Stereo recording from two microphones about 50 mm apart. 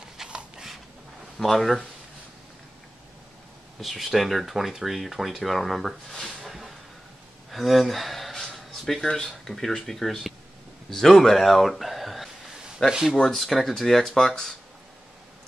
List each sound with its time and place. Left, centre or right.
0.3 s a sound: centre
1.4 s speech: centre
3.8 s speech: centre
7.5 s a sound: centre
9.4 s speech: centre
12.8 s speech: centre
13.2 s speech: centre